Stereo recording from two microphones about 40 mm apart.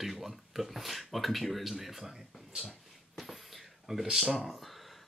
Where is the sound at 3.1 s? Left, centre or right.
Centre.